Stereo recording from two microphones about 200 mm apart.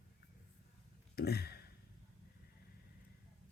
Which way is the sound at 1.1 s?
50° left (ahead or behind).